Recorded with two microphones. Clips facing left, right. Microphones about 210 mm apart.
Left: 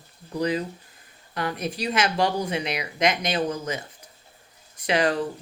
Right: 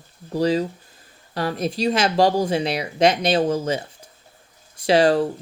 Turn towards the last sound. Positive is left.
turn(degrees=-30)  # may be behind; listen again after turning